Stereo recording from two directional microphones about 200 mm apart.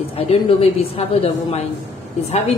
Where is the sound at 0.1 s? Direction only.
30° left (ahead or behind).